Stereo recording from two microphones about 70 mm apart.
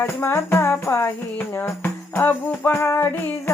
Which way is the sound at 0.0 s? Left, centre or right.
Left.